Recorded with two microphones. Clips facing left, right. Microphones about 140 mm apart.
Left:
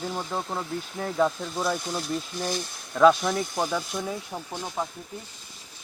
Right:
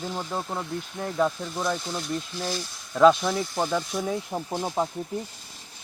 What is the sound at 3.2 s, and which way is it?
Speech, centre (ahead or behind).